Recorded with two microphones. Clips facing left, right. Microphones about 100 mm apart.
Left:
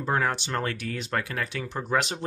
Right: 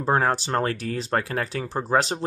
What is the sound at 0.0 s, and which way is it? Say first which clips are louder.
Speech: right 5 dB; 35° right (ahead or behind).